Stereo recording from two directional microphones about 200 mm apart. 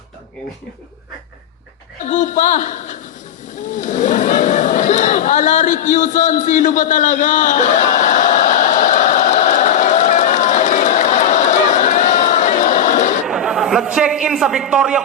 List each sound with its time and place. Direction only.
2.0 s a woman's voice: 40° left (ahead or behind)
3.8 s a sound: 40° left (ahead or behind)
13.2 s a man's voice: centre (ahead or behind)